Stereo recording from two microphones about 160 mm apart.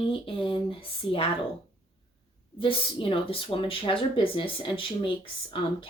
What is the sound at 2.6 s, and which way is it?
Speech, 35° left (ahead or behind).